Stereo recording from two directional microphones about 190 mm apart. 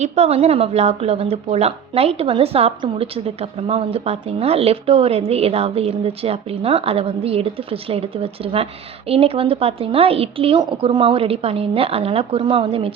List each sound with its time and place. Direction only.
0.0 s a woman's voice: 35° right (ahead or behind)